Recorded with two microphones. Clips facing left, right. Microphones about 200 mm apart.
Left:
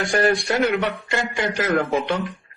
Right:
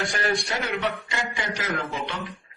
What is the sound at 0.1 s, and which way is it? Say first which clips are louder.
A man's voice: left 7 dB; 55° left (ahead or behind).